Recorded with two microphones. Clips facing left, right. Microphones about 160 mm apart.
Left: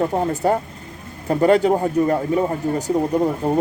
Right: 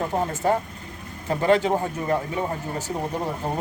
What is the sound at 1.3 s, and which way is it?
Speech, 40° left (ahead or behind).